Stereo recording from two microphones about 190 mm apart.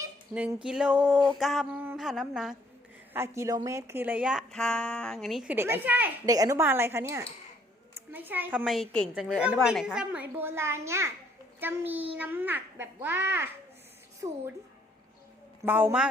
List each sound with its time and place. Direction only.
0.0 s fowl: 5° right (ahead or behind)
3.1 s speech: 15° right (ahead or behind)
15.6 s speech: 10° right (ahead or behind)